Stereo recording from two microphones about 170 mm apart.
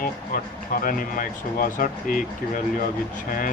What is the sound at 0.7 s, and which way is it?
Speech, 55° left (ahead or behind).